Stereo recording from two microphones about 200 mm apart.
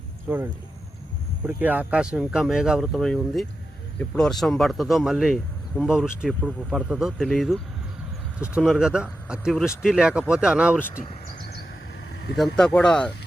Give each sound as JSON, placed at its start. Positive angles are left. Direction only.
{"t": 0.3, "sound": "speech", "side_deg": -10}
{"t": 11.0, "sound": "speech", "side_deg": 30}
{"t": 12.4, "sound": "speech", "side_deg": 5}